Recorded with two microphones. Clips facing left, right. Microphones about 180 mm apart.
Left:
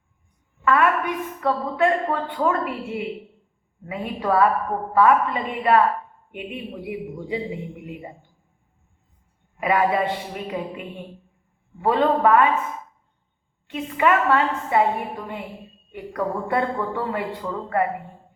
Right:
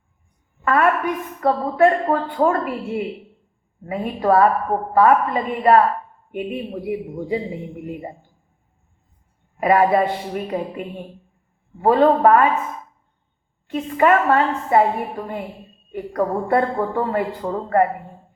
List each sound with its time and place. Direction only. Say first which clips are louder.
0.6 s a woman's voice: right 2 dB; 40° right (ahead or behind)
9.6 s a woman's voice: right 5 dB; 40° right (ahead or behind)
13.7 s a woman's voice: right 4 dB; 40° right (ahead or behind)
15.9 s a woman's voice: right 5 dB; 40° right (ahead or behind)